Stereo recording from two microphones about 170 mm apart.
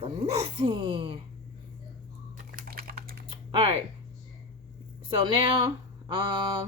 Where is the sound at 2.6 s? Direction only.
60° right (ahead or behind).